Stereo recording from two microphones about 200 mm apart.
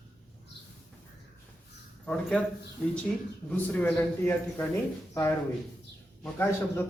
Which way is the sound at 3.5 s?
10° left (ahead or behind).